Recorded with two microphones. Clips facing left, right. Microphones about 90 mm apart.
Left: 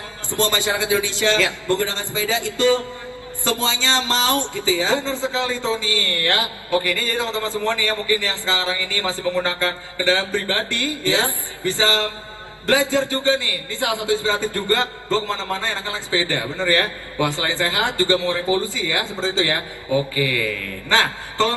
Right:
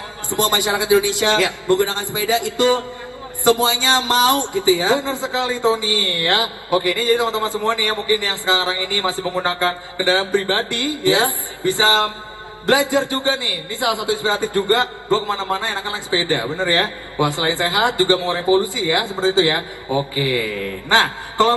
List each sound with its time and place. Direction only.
0.3 s a man's voice: 20° right (ahead or behind)